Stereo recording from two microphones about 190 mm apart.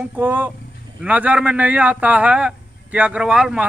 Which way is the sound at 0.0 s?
10° right (ahead or behind).